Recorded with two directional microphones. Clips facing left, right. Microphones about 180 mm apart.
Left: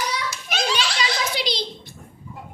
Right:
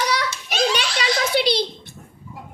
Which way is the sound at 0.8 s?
60° right (ahead or behind).